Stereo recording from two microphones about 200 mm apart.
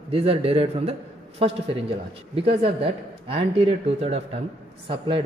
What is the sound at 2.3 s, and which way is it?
Speech, 30° right (ahead or behind).